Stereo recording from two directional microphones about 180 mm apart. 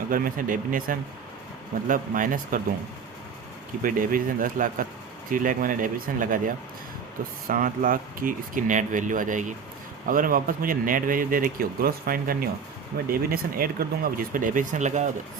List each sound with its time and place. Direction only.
0.1 s speech: 50° right (ahead or behind)
3.8 s speech: 50° right (ahead or behind)